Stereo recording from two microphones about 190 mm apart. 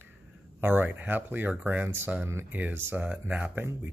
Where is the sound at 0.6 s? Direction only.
10° right (ahead or behind).